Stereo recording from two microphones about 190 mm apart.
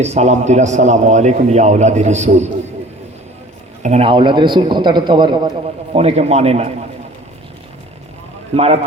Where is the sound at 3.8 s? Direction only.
30° right (ahead or behind).